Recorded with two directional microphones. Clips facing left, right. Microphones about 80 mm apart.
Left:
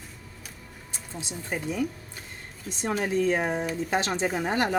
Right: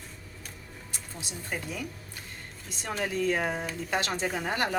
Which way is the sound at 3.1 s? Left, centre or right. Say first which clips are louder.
Left 3 dB; left.